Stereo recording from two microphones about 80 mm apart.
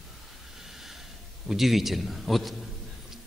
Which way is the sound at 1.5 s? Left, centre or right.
Centre.